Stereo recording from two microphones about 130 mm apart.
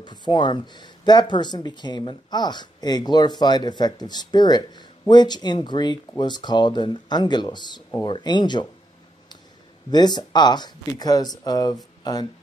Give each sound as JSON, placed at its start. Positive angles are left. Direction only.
{"t": 0.0, "sound": "speech", "side_deg": 35}
{"t": 9.8, "sound": "speech", "side_deg": 35}